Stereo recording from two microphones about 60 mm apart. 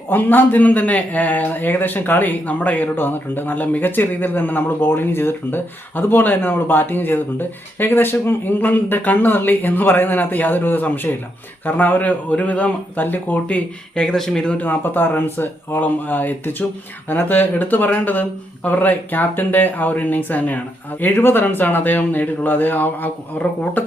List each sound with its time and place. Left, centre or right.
0.1 s a man's voice: left
13.9 s speech: centre
14.6 s a man's voice: left